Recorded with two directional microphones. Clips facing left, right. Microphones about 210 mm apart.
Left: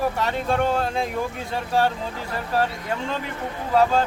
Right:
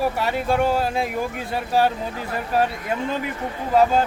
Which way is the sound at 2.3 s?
15° right (ahead or behind).